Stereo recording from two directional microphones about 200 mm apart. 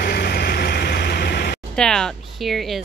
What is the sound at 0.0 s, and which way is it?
Vehicle, 50° left (ahead or behind).